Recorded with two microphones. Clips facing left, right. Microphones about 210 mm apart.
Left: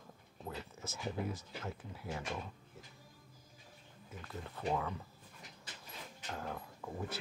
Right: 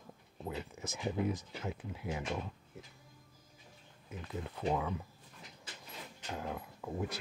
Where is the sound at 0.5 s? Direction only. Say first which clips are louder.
Right 4 dB; 15° right (ahead or behind).